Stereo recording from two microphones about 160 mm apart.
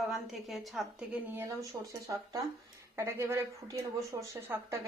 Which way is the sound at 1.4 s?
20° right (ahead or behind).